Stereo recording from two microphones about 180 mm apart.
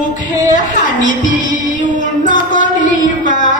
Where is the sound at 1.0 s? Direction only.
45° left (ahead or behind).